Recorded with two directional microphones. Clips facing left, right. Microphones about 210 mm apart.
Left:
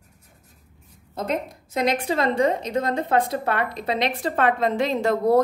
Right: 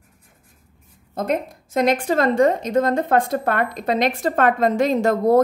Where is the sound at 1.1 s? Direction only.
50° right (ahead or behind).